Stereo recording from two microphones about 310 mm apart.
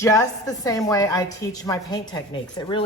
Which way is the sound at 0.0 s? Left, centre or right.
Centre.